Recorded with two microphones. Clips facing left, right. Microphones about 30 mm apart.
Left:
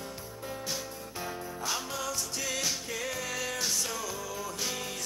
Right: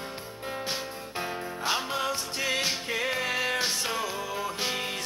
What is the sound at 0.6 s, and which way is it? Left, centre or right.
Music, right.